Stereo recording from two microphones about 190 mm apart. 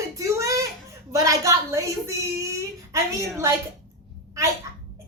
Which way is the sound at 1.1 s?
15° right (ahead or behind).